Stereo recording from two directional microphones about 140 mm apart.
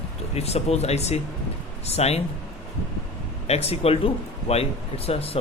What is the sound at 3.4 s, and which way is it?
Speech, 45° left (ahead or behind).